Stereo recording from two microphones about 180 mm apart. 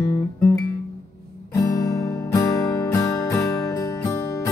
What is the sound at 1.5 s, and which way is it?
Music, 20° left (ahead or behind).